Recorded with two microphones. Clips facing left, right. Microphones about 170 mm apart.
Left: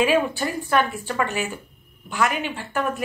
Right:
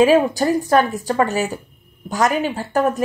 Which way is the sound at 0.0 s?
40° right (ahead or behind).